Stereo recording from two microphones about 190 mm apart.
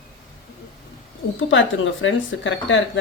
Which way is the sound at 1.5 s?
85° left.